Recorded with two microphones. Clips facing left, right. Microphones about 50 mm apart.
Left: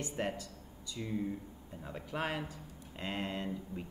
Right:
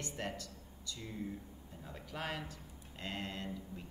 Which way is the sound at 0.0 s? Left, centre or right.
Left.